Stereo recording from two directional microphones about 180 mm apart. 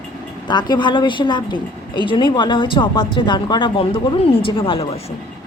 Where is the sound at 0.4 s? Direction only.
25° left (ahead or behind).